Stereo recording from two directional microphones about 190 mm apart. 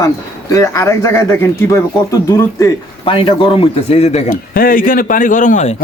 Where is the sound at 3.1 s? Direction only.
25° left (ahead or behind).